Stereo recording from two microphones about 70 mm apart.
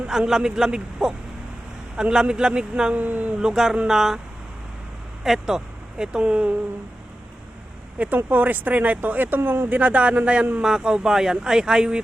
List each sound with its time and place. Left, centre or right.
0.0 s a man's voice: centre
2.9 s speech: right
3.4 s speech: centre
5.2 s speech: centre
7.9 s speech: right